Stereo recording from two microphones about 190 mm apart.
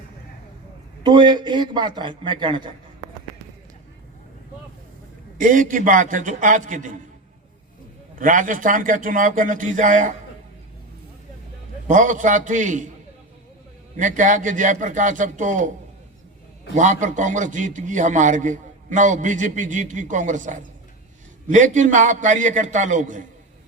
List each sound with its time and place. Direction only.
1.0 s a man's voice: 25° right (ahead or behind)
5.4 s a man's voice: 45° right (ahead or behind)
8.2 s a man's voice: 45° right (ahead or behind)
11.9 s a man's voice: 45° right (ahead or behind)
13.9 s a man's voice: 40° right (ahead or behind)
16.7 s a man's voice: 40° right (ahead or behind)